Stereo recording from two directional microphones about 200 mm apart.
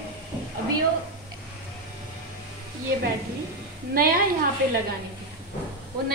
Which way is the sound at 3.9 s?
45° right (ahead or behind).